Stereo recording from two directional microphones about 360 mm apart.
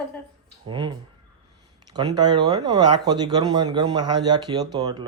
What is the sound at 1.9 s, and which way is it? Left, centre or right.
Speech, centre.